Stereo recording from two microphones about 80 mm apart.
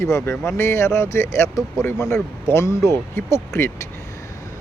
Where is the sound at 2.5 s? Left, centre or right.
Left.